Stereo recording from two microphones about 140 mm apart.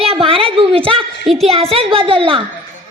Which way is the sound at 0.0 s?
45° right (ahead or behind).